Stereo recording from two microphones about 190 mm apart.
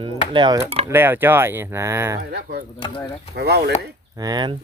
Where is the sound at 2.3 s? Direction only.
60° right (ahead or behind).